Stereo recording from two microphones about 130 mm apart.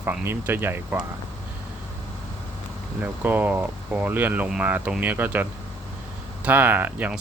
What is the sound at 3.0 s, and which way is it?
Speech, 15° right (ahead or behind).